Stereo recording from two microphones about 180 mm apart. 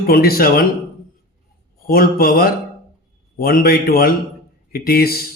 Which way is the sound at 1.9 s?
55° left (ahead or behind).